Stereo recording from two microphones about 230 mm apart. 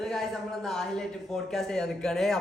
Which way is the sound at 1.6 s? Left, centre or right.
Centre.